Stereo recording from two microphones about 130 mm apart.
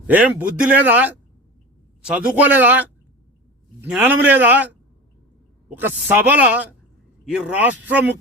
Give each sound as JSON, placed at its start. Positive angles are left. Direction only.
{"t": 0.1, "sound": "a woman's voice", "side_deg": -10}